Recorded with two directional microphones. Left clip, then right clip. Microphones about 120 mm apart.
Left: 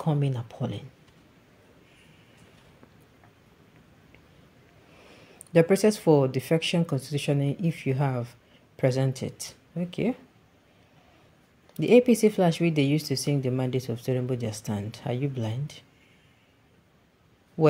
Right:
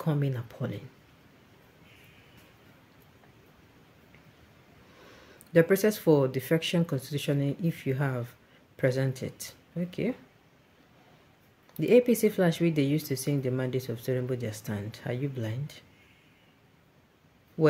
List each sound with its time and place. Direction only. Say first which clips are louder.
0.0 s speech: left 2 dB; 10° left (ahead or behind)
5.5 s speech: left 2 dB; 15° left (ahead or behind)
11.7 s speech: left 3 dB; 15° left (ahead or behind)